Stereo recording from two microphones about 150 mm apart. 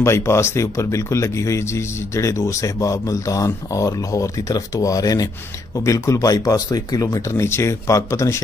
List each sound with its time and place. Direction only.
0.0 s speech: 20° left (ahead or behind)